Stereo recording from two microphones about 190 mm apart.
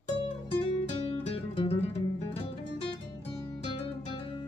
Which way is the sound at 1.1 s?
30° left (ahead or behind).